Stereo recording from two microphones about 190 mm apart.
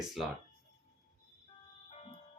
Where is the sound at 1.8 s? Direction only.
35° left (ahead or behind).